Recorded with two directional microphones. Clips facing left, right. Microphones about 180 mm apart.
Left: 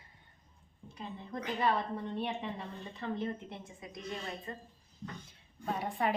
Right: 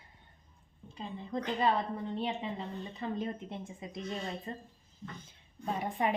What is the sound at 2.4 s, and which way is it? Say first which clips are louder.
A woman's voice: right 2 dB; 15° right (ahead or behind).